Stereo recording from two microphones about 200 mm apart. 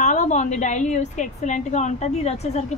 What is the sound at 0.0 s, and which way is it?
A woman's voice, 35° left (ahead or behind).